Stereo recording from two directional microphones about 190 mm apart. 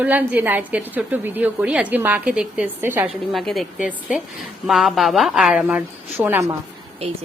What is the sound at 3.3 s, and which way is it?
A woman's voice, centre (ahead or behind).